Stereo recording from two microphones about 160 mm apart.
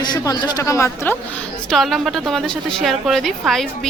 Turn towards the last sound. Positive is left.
turn(degrees=0)  # may be behind; listen again after turning